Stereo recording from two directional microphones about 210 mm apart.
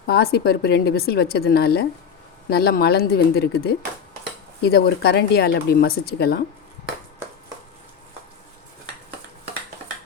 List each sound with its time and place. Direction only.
0.1 s a woman's voice: 50° left (ahead or behind)